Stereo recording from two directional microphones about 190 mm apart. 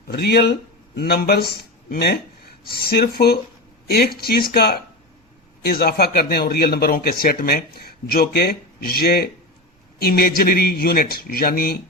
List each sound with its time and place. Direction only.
0.1 s a man's voice: 55° left (ahead or behind)